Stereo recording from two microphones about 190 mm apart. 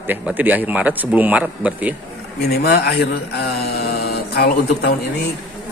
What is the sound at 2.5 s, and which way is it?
Speech, 55° left (ahead or behind).